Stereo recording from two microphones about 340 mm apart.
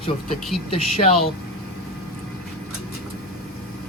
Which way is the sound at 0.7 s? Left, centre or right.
Centre.